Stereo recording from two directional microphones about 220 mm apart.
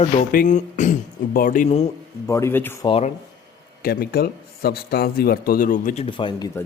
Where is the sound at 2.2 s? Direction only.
15° left (ahead or behind).